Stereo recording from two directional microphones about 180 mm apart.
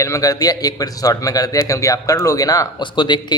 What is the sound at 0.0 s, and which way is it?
A man's voice, 20° left (ahead or behind).